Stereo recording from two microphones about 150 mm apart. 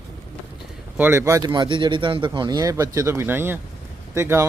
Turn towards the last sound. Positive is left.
turn(degrees=-15)  # may be behind; listen again after turning